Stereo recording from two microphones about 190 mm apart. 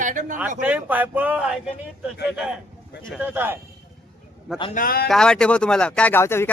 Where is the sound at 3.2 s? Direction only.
10° right (ahead or behind).